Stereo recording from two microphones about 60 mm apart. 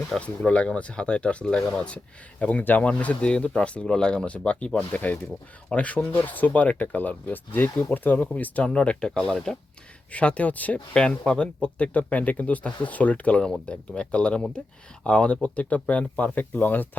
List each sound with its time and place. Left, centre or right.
0.4 s speech: centre
7.5 s speech: left; by 9.6 s centre
10.1 s speech: left